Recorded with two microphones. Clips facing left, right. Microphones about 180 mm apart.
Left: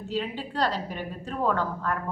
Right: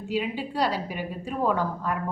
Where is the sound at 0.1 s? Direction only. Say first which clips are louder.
Right 3 dB; 10° right (ahead or behind).